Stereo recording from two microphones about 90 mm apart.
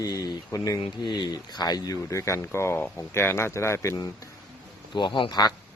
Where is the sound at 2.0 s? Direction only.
35° left (ahead or behind).